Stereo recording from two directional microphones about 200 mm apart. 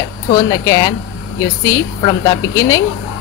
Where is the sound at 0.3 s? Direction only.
20° left (ahead or behind).